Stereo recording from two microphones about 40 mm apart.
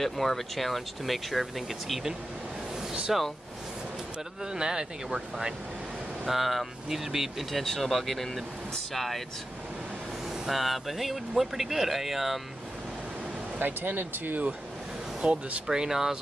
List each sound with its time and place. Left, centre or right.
0.0 s speech: centre
4.5 s speech: centre
6.2 s speech: centre
7.6 s speech: centre
10.5 s speech: centre
13.6 s speech: right
15.2 s speech: centre